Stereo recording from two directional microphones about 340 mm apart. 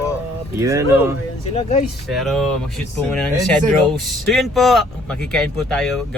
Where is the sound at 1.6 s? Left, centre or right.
Centre.